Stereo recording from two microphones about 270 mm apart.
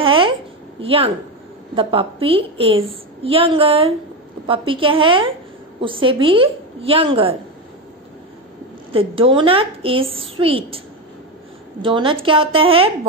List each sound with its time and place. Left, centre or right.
0.0 s a sound: centre
0.7 s a woman's voice: right
8.9 s a woman's voice: centre
11.8 s a woman's voice: centre